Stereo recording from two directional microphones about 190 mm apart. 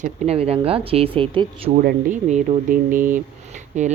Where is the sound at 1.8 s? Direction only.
50° right (ahead or behind).